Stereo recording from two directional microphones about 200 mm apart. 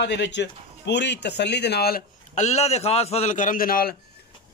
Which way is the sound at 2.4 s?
35° left (ahead or behind).